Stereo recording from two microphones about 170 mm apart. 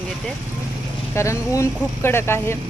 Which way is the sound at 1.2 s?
15° left (ahead or behind).